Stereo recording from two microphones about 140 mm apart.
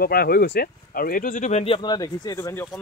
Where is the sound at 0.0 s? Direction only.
90° left; by 1.8 s 50° left (ahead or behind).